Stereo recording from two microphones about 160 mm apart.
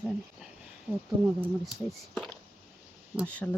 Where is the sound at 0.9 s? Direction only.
10° right (ahead or behind).